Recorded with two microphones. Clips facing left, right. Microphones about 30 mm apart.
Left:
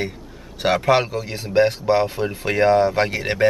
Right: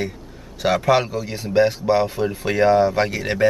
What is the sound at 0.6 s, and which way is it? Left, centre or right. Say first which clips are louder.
Speech: even; centre.